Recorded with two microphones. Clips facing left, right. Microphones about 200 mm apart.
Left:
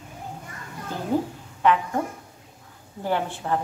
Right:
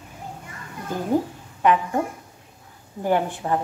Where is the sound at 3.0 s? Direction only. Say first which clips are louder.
Right 4 dB; 15° right (ahead or behind).